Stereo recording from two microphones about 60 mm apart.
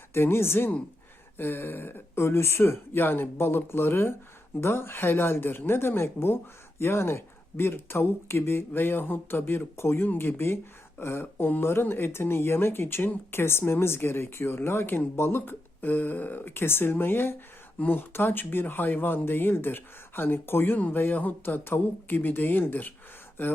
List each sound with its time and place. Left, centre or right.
0.1 s speech: left